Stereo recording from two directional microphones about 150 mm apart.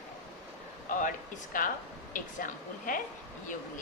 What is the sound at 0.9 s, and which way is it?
A woman's voice, 65° left (ahead or behind).